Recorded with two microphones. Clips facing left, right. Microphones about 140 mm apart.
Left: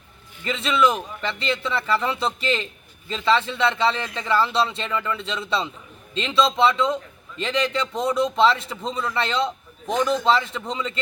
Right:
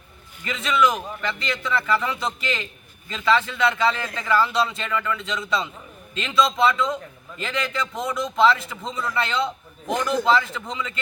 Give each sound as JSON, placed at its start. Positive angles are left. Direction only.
{"t": 0.4, "sound": "a man's voice", "side_deg": 30}